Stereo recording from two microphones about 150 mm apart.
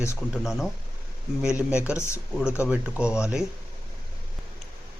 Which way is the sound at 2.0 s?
20° left (ahead or behind).